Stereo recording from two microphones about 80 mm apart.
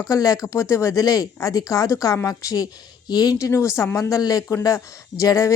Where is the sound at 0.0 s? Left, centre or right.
Left.